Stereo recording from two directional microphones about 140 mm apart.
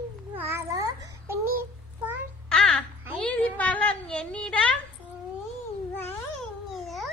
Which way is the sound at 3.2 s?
10° left (ahead or behind).